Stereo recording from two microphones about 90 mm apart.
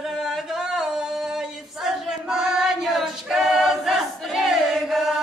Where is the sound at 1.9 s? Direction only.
5° right (ahead or behind).